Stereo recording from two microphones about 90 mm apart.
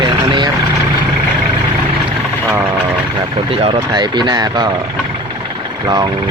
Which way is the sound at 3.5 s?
90° right.